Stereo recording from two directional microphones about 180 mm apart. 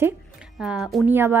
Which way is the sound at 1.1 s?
10° right (ahead or behind).